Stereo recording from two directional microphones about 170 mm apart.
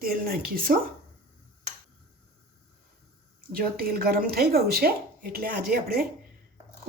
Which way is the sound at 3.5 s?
60° right (ahead or behind).